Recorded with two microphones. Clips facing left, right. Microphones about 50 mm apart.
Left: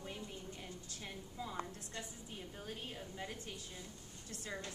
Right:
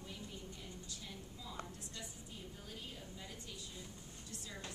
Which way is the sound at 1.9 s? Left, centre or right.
Left.